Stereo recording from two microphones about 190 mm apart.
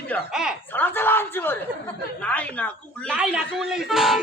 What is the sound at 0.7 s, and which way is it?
A man's voice, 10° left (ahead or behind).